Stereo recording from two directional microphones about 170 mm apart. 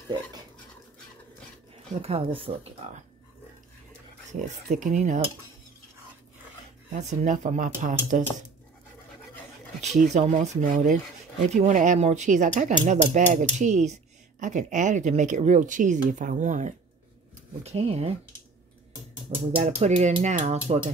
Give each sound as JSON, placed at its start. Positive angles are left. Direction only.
{"t": 2.0, "sound": "speech", "side_deg": -35}
{"t": 4.3, "sound": "speech", "side_deg": -45}
{"t": 7.0, "sound": "speech", "side_deg": -40}
{"t": 9.8, "sound": "speech", "side_deg": -40}
{"t": 19.5, "sound": "speech", "side_deg": -40}